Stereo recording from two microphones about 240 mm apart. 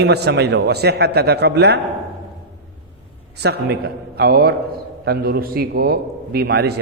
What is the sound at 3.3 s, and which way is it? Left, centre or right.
A man's voice, right.